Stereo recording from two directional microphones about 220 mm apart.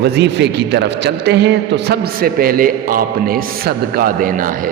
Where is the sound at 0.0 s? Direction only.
50° right (ahead or behind).